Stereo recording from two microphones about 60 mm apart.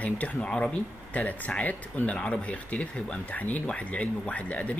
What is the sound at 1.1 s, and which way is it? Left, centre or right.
Speech, left.